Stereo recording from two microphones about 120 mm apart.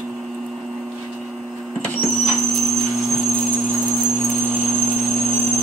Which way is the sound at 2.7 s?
Centre (ahead or behind).